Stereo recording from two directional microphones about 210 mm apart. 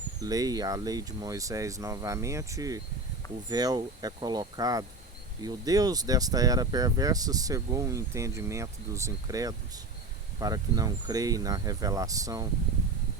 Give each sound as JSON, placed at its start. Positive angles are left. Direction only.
{"t": 0.2, "sound": "speech", "side_deg": -15}